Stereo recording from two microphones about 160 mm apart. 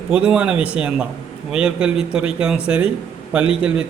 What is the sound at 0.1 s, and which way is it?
A man's voice, 5° right (ahead or behind).